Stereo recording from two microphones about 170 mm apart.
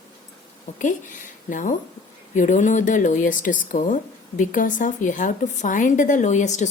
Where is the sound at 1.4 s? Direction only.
50° left (ahead or behind).